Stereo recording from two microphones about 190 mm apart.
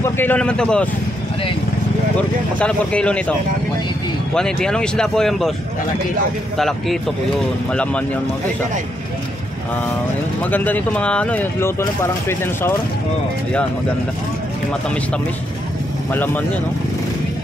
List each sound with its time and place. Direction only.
0.0 s speech: 10° left (ahead or behind)
2.6 s speech: 5° left (ahead or behind)
7.7 s speech: 5° left (ahead or behind)
10.4 s speech: 10° left (ahead or behind)